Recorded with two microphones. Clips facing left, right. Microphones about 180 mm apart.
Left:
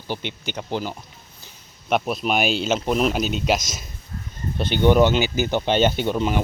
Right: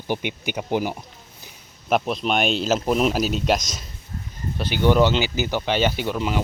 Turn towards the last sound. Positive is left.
turn(degrees=25)  # may be behind; listen again after turning